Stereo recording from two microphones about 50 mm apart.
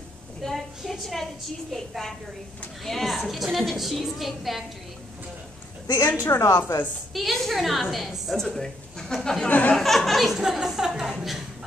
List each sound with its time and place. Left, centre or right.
0.4 s a woman's voice: centre
6.2 s a woman's voice: left
7.2 s a woman's voice: centre
8.4 s a woman's voice: centre
9.5 s speech: left
9.8 s a woman's voice: centre